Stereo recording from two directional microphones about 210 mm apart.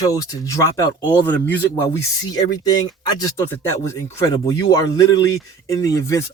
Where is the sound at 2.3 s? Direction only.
20° left (ahead or behind).